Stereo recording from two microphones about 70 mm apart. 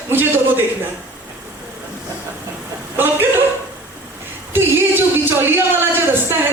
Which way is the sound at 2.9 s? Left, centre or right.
Right.